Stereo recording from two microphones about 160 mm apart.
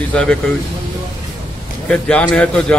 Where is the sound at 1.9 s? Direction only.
5° left (ahead or behind).